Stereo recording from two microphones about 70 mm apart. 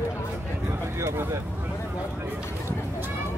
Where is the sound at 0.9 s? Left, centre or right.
Right.